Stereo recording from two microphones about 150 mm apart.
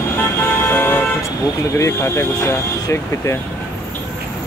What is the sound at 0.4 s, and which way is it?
Vehicle, 15° left (ahead or behind).